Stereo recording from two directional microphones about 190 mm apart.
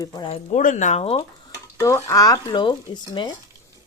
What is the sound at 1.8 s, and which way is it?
Speech, 15° left (ahead or behind).